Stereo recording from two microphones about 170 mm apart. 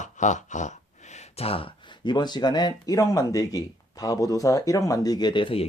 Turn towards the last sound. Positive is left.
turn(degrees=30)  # may be behind; listen again after turning